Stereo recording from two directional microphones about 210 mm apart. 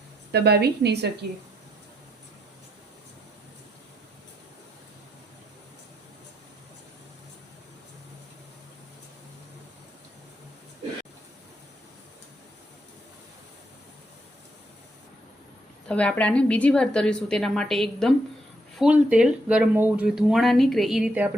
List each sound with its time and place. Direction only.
0.3 s a woman's voice: 50° right (ahead or behind)
15.9 s speech: 5° left (ahead or behind)